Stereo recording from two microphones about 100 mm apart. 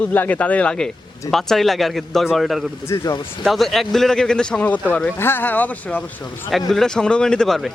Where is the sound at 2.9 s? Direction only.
30° left (ahead or behind).